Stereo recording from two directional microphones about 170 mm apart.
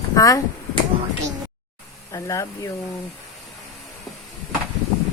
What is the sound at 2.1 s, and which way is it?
Speech, 15° left (ahead or behind).